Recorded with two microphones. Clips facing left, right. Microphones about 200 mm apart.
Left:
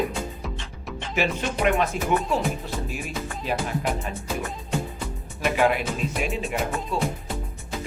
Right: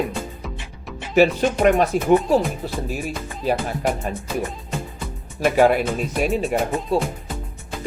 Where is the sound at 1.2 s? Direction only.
35° right (ahead or behind).